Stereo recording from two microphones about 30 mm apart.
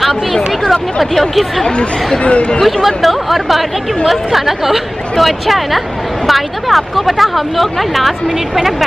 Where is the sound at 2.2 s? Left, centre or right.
Left.